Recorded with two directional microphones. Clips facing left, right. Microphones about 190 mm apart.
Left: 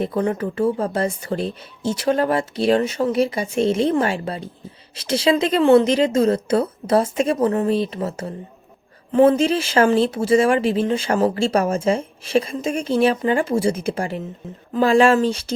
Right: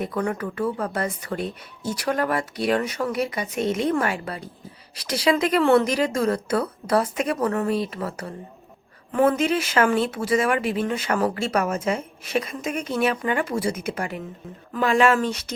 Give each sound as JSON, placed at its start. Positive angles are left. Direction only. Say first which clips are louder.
{"t": 0.0, "sound": "speech", "louder": "left 5 dB", "side_deg": 25}